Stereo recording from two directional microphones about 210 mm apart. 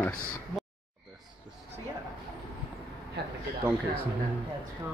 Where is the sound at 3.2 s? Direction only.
55° right (ahead or behind).